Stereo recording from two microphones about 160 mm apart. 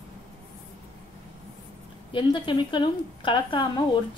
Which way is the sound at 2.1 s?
30° left (ahead or behind).